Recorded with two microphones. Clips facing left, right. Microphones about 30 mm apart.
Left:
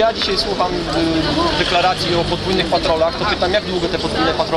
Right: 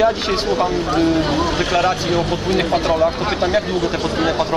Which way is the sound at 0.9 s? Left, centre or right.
Left.